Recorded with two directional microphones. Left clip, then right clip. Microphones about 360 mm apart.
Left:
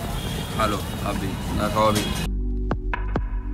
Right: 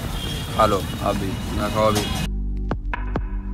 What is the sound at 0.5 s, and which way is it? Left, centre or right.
Speech, centre.